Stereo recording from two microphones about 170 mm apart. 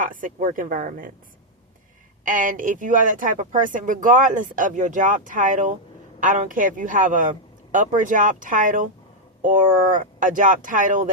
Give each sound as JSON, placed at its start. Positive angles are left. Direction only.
{"t": 0.0, "sound": "speech", "side_deg": -50}
{"t": 2.2, "sound": "speech", "side_deg": -50}